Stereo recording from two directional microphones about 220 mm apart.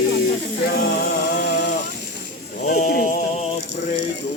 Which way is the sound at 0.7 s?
45° left (ahead or behind).